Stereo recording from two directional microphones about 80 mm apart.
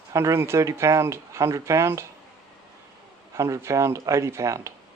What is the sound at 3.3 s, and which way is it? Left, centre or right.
Speech, right.